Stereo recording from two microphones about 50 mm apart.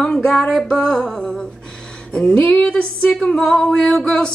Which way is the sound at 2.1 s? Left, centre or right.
Left.